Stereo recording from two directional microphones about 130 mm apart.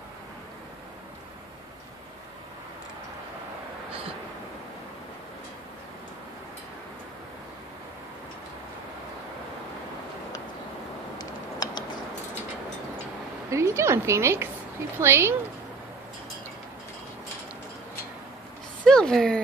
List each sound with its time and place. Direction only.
11.1 s computer keyboard: 30° left (ahead or behind)
13.5 s a woman's voice: 20° right (ahead or behind)
18.9 s speech: 5° left (ahead or behind)